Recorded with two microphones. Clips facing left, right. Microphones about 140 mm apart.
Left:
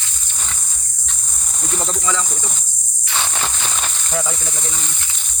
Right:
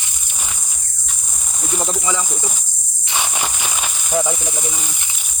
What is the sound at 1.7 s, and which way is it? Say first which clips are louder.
Speech: right 1 dB; 10° right (ahead or behind).